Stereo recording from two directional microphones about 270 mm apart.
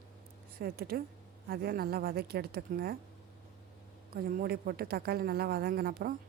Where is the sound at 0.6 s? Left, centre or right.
Right.